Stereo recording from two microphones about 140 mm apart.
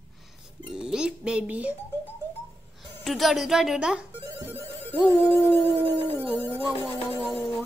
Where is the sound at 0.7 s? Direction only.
5° right (ahead or behind).